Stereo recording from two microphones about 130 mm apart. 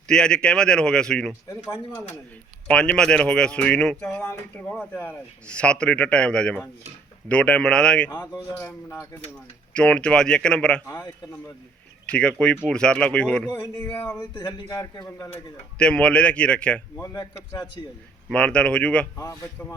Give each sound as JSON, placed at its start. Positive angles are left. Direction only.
{"t": 0.1, "sound": "speech", "side_deg": 5}
{"t": 2.6, "sound": "speech", "side_deg": 10}
{"t": 8.1, "sound": "a man's voice", "side_deg": 25}
{"t": 9.7, "sound": "speech", "side_deg": 10}
{"t": 12.0, "sound": "speech", "side_deg": 10}
{"t": 13.5, "sound": "a man's voice", "side_deg": 20}
{"t": 17.0, "sound": "a man's voice", "side_deg": 25}
{"t": 18.3, "sound": "speech", "side_deg": 10}
{"t": 19.1, "sound": "a man's voice", "side_deg": 25}